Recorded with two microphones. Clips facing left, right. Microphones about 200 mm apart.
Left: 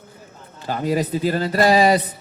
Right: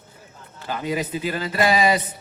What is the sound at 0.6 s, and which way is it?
A man's voice, 40° left (ahead or behind).